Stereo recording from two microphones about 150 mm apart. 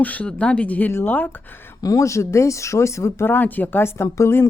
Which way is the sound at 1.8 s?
20° left (ahead or behind).